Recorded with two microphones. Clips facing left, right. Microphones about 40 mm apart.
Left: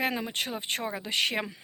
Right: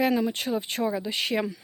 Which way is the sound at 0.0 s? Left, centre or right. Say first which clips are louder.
Right 6 dB; left.